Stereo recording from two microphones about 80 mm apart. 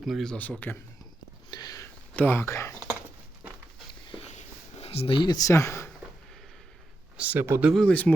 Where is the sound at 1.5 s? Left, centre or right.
Left.